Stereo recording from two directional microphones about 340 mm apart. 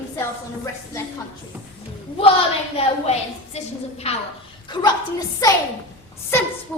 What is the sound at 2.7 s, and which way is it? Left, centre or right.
A woman's voice, centre.